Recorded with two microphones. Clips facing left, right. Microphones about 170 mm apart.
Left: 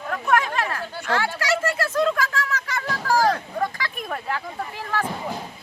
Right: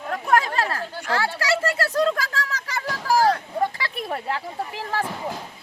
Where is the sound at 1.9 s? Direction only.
35° right (ahead or behind).